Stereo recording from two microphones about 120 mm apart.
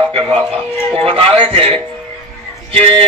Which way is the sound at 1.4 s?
45° right (ahead or behind).